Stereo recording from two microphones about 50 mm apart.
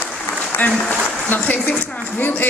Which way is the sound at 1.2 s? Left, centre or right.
Left.